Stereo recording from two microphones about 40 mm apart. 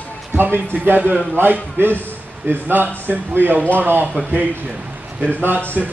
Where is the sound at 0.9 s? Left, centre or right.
Right.